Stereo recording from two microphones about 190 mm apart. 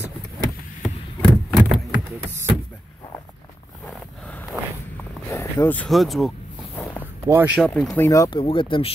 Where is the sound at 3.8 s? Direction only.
5° left (ahead or behind).